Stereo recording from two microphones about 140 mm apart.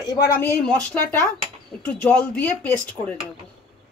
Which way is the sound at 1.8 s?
10° left (ahead or behind).